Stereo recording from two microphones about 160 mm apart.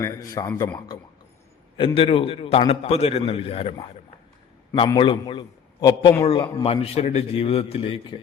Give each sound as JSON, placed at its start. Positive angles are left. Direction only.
{"t": 0.0, "sound": "a man's voice", "side_deg": 20}
{"t": 1.7, "sound": "a man's voice", "side_deg": 35}
{"t": 4.9, "sound": "a man's voice", "side_deg": 30}